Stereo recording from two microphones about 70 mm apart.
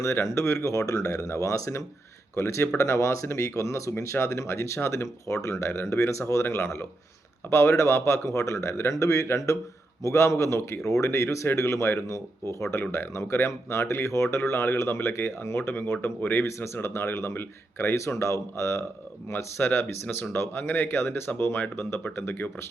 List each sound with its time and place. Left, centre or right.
0.0 s speech: left